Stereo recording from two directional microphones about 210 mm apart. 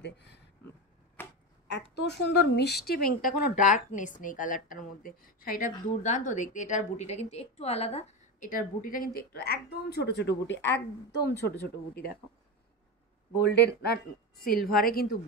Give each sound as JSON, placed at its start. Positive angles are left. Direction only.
{"t": 0.0, "sound": "speech", "side_deg": 55}
{"t": 1.2, "sound": "a sound", "side_deg": 10}
{"t": 2.5, "sound": "a woman's voice", "side_deg": 50}
{"t": 13.4, "sound": "a woman's voice", "side_deg": 55}